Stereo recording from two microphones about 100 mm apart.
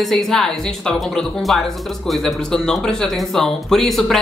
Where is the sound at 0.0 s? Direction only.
5° left (ahead or behind).